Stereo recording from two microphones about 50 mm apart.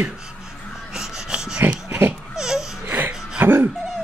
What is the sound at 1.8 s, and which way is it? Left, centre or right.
Pig, right.